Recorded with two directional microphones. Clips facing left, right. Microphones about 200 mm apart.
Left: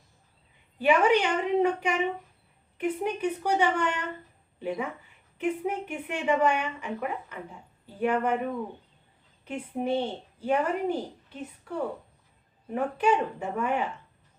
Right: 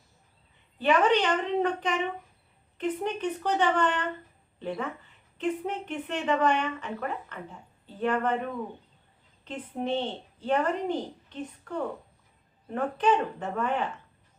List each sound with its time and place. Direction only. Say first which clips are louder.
0.8 s a woman's voice: left 1 dB; 10° left (ahead or behind)